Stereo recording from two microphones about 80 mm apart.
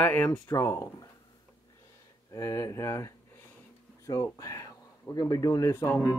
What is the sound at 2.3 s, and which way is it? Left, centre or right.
Speech, left.